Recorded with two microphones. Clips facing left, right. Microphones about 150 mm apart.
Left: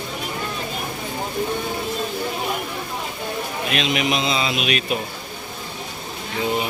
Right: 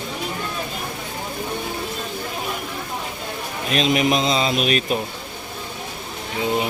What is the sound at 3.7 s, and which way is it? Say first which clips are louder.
Speech: right 4 dB; 40° right (ahead or behind).